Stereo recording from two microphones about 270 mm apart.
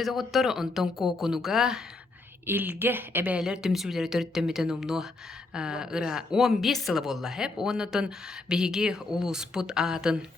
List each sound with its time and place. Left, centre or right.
0.0 s a woman's voice: centre